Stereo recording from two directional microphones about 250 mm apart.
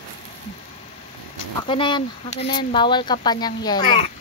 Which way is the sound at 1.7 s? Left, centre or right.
Centre.